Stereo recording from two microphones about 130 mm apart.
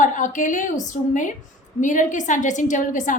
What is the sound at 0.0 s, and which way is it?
A woman's voice, 80° left.